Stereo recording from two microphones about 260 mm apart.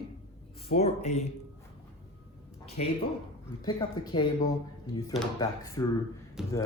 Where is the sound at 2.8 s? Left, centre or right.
Left.